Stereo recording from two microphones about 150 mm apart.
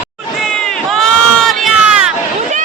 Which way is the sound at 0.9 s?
5° left (ahead or behind).